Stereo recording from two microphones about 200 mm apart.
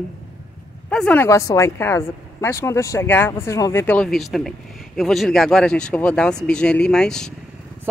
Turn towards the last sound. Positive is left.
turn(degrees=5)  # may be behind; listen again after turning